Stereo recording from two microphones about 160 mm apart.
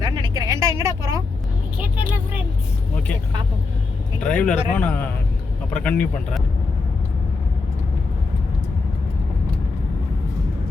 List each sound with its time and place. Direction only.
0.0 s vehicle: 25° right (ahead or behind)
4.2 s speech: 10° left (ahead or behind)